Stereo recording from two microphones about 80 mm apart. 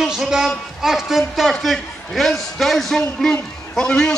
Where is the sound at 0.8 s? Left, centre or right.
Centre.